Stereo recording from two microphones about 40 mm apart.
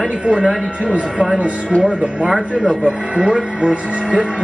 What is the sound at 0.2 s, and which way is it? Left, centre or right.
Speech, right.